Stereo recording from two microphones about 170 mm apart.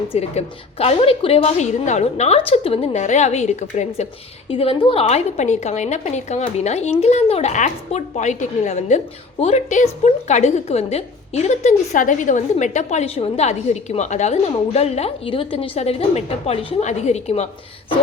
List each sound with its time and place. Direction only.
0.1 s a woman's voice: 35° left (ahead or behind)
4.4 s a woman's voice: 30° left (ahead or behind)